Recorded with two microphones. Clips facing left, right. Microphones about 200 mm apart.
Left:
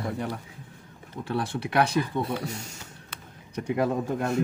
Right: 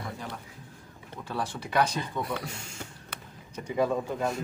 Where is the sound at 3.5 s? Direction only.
65° left (ahead or behind).